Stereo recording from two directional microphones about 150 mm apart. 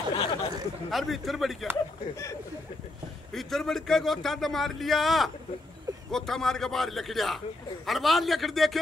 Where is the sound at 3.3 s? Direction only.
Centre (ahead or behind).